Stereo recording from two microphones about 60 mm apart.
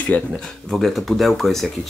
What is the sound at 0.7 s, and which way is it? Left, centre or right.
Speech, centre.